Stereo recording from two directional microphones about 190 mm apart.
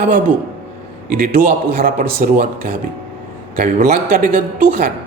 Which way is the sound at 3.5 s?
45° right (ahead or behind).